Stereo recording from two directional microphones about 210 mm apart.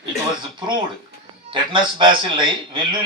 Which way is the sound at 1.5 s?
20° right (ahead or behind).